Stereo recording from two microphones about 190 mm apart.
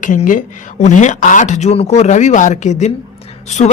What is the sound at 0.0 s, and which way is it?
Speech, 45° left (ahead or behind).